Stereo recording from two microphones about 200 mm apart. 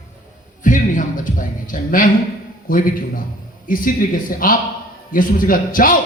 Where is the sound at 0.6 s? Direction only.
40° left (ahead or behind).